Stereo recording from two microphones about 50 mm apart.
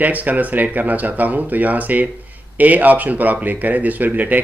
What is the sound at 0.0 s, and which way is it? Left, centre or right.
Speech, right.